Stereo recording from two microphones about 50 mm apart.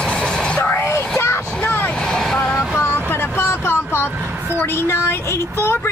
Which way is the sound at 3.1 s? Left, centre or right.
Left.